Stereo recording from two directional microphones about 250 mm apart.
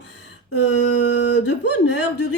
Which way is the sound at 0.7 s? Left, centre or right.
Left.